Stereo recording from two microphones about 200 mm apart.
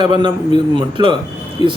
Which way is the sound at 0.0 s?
25° right (ahead or behind).